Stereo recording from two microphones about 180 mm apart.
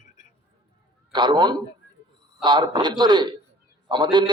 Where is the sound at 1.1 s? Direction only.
25° right (ahead or behind).